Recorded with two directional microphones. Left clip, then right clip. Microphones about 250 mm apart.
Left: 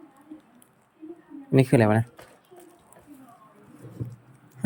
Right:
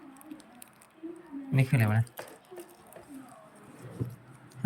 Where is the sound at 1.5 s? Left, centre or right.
Left.